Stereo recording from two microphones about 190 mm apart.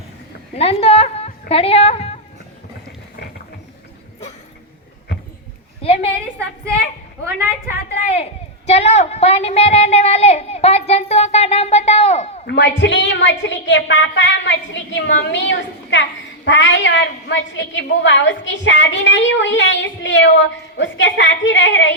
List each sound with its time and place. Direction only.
0.5 s a woman's voice: 30° left (ahead or behind)
5.8 s a woman's voice: 30° left (ahead or behind)
8.1 s a woman's voice: 35° left (ahead or behind)
12.5 s a woman's voice: 65° left (ahead or behind)